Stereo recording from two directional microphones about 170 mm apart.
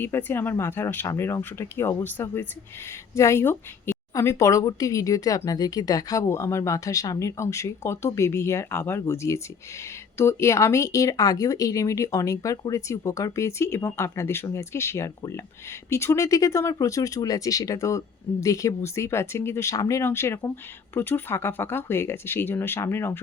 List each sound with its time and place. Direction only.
0.0 s a woman's voice: 10° left (ahead or behind)